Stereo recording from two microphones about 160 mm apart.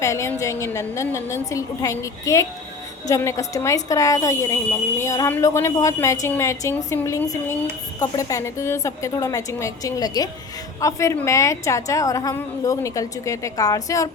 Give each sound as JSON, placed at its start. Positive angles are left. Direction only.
{"t": 0.0, "sound": "a woman's voice", "side_deg": 20}